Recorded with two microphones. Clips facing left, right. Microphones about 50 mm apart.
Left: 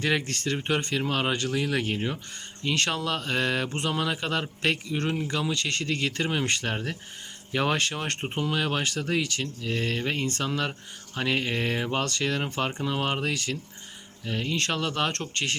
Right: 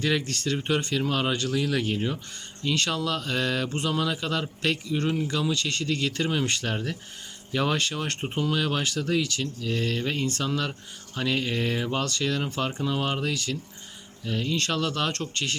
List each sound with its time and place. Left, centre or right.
0.0 s speech: left